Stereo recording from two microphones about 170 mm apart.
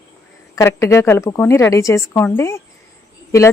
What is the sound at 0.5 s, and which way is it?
A woman's voice, 15° left (ahead or behind).